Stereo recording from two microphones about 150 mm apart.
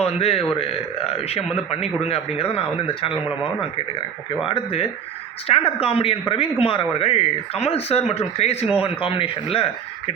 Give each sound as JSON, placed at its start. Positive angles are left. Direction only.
{"t": 0.0, "sound": "a man's voice", "side_deg": 40}
{"t": 4.4, "sound": "speech", "side_deg": 40}